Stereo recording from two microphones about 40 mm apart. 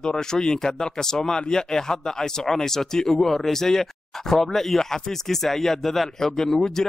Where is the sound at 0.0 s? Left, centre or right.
Centre.